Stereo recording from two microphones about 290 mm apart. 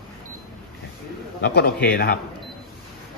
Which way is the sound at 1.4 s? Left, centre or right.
Left.